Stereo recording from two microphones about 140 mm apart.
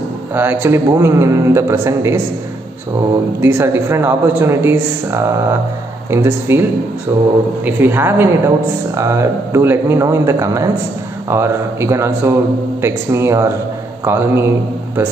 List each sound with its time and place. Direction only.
0.3 s a man's voice: 15° right (ahead or behind)
3.3 s a man's voice: 15° right (ahead or behind)
7.6 s a man's voice: 15° right (ahead or behind)